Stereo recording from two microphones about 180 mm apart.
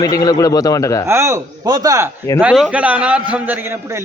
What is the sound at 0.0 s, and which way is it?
A man's voice, 20° left (ahead or behind).